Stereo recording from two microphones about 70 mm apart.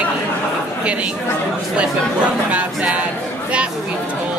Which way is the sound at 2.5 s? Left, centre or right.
Centre.